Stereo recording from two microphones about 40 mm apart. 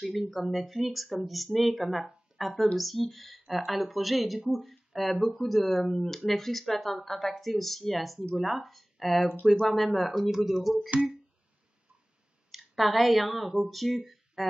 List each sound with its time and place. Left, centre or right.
0.0 s speech: centre
12.4 s speech: centre